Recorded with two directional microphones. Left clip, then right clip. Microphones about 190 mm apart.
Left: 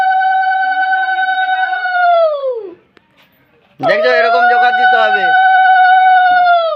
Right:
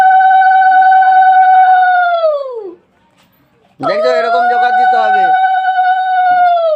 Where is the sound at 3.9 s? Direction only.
15° right (ahead or behind).